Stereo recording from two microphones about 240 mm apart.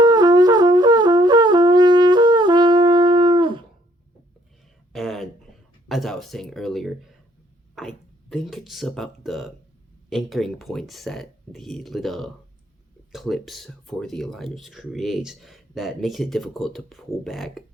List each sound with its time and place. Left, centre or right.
0.0 s shofar: centre
4.9 s a sound: centre
5.9 s speech: centre